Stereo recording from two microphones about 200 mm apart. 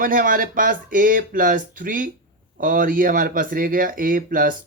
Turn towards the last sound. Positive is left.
turn(degrees=-45)  # may be behind; listen again after turning